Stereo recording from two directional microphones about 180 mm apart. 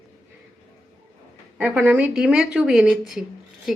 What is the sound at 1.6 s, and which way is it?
A woman's voice, 5° right (ahead or behind).